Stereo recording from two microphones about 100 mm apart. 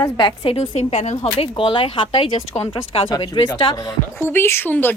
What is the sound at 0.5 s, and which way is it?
Speech, 90° left.